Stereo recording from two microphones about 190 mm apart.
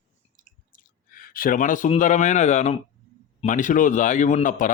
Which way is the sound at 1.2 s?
45° left (ahead or behind).